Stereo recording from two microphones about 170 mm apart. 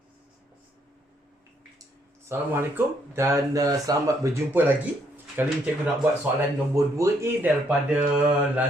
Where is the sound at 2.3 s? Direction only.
15° right (ahead or behind).